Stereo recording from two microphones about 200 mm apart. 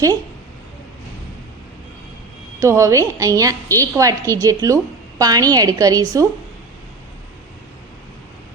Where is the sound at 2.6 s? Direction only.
15° right (ahead or behind).